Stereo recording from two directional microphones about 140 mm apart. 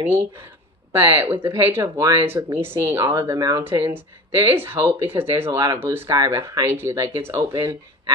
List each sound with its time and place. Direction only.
0.0 s speech: 15° right (ahead or behind)
3.6 s speech: 15° right (ahead or behind)
6.0 s speech: 25° right (ahead or behind)